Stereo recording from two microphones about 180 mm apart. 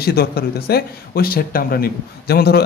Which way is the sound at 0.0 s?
60° left (ahead or behind).